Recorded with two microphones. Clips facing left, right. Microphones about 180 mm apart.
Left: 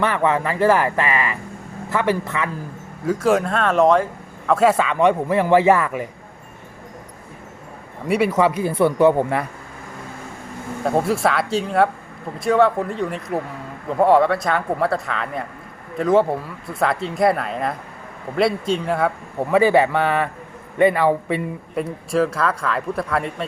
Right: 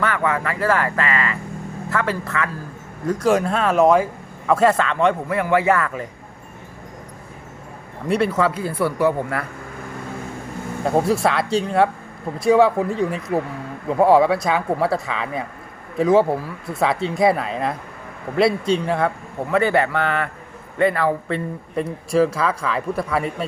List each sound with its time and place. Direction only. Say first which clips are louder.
0.0 s speech: left 2 dB; 25° left (ahead or behind)
3.1 s a man's voice: even; centre (ahead or behind)
8.0 s speech: left 1 dB; 10° left (ahead or behind); by 9.5 s 25° left (ahead or behind)
10.8 s a man's voice: right 1 dB; centre (ahead or behind)
19.5 s speech: left 3 dB; 15° left (ahead or behind)
21.8 s a man's voice: right 3 dB; centre (ahead or behind)